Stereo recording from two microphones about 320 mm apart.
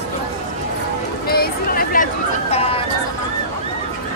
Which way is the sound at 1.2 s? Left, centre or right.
Left.